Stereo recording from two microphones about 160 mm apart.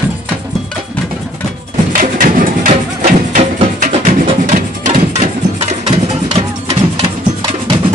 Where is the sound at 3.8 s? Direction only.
55° right (ahead or behind).